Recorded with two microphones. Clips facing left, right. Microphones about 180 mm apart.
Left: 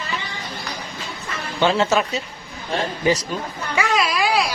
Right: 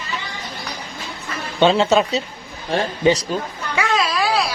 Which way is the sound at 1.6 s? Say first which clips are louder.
Right 3 dB; 20° right (ahead or behind).